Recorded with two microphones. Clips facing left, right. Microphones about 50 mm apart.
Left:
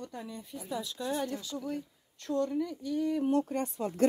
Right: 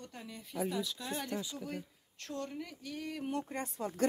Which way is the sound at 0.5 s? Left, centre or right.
Right.